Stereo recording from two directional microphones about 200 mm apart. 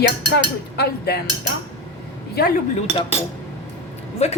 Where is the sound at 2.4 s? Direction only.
50° left (ahead or behind).